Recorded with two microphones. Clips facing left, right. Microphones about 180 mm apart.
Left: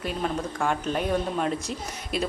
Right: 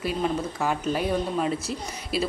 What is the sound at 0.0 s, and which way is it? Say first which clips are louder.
Speech: right 2 dB; 5° right (ahead or behind).